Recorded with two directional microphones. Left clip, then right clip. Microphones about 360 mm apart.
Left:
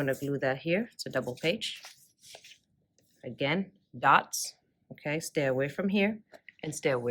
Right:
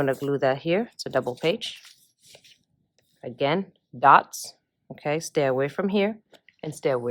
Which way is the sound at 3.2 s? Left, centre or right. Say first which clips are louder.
Right 6 dB; centre.